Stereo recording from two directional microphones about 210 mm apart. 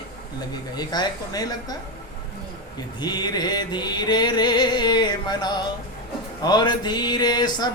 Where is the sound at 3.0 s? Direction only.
20° left (ahead or behind).